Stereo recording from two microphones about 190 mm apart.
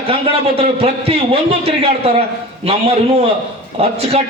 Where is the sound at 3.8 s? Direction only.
35° right (ahead or behind).